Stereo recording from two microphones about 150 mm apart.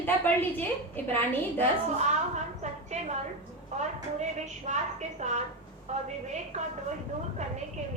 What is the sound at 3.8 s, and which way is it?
A woman's voice, 50° right (ahead or behind).